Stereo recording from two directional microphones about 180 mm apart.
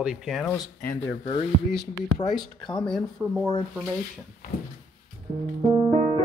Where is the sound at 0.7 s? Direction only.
60° left (ahead or behind).